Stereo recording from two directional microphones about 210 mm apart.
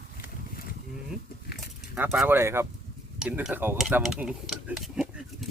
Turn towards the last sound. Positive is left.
turn(degrees=-5)  # may be behind; listen again after turning